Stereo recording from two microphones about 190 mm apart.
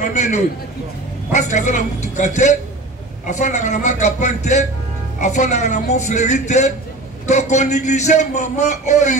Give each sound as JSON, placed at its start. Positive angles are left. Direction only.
{"t": 0.0, "sound": "a man's voice", "side_deg": 40}